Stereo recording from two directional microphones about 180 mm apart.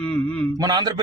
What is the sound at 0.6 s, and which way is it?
Speech, 20° right (ahead or behind).